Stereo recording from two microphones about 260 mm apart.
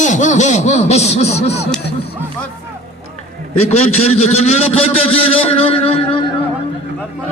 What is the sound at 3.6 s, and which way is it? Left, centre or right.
A man's voice, left.